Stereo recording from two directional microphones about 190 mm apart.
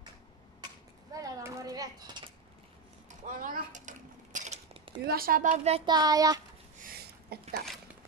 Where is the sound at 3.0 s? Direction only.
40° right (ahead or behind).